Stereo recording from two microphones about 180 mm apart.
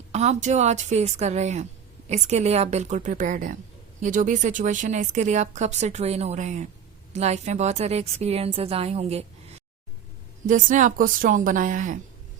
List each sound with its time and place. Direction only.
0.1 s speech: 40° right (ahead or behind)
10.4 s a woman's voice: 45° right (ahead or behind)